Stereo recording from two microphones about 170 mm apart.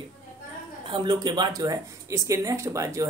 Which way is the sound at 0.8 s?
25° right (ahead or behind).